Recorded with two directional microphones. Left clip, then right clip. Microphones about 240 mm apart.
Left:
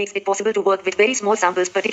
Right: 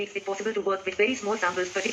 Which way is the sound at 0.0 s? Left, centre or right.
Left.